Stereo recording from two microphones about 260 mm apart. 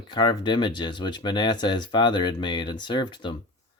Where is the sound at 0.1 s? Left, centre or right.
Centre.